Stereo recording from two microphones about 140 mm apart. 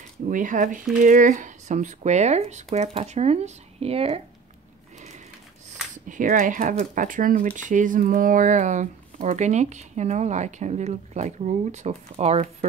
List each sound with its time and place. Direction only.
0.3 s speech: 70° right (ahead or behind); by 4.2 s 45° right (ahead or behind)
6.0 s speech: 75° right (ahead or behind)
7.5 s speech: 65° right (ahead or behind); by 12.4 s 50° right (ahead or behind)